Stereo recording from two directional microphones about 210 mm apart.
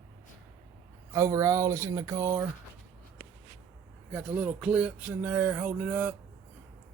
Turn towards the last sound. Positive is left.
turn(degrees=-10)  # may be behind; listen again after turning